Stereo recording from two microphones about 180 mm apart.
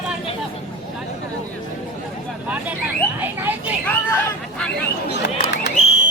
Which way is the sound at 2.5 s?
10° right (ahead or behind).